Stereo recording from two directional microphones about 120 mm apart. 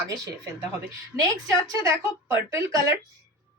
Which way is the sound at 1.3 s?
25° right (ahead or behind).